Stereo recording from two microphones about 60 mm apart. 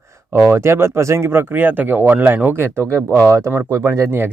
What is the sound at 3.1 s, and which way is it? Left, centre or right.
Speech, right.